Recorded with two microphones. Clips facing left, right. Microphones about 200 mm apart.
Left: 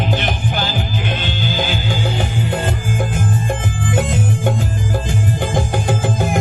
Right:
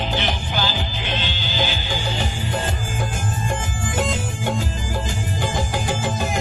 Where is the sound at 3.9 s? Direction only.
55° left (ahead or behind).